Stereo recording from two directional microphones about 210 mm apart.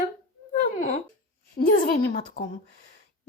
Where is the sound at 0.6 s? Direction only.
35° left (ahead or behind).